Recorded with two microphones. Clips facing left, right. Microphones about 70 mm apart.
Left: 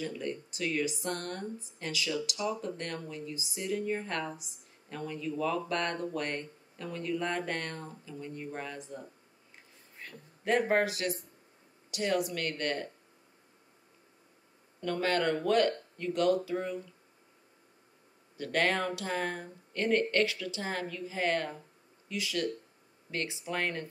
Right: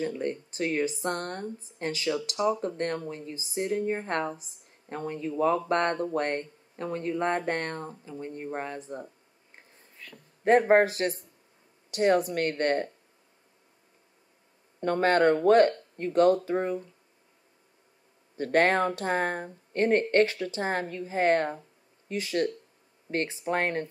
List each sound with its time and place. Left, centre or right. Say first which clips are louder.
0.0 s speech: right 6 dB; right
10.0 s a sound: left 1 dB; left
10.4 s speech: right 7 dB; right
14.8 s speech: right 7 dB; right
18.4 s speech: right 7 dB; right